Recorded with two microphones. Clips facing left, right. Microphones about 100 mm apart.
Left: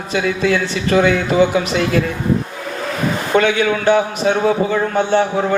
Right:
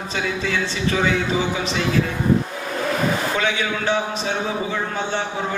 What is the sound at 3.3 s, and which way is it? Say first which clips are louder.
A man's voice: left 8 dB; 60° left (ahead or behind).